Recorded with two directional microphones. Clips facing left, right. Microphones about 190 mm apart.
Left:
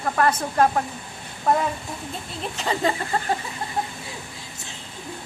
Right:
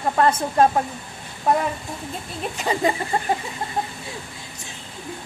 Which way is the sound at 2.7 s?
15° right (ahead or behind).